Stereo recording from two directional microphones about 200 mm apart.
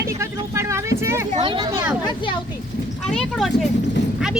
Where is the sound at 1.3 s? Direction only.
25° right (ahead or behind).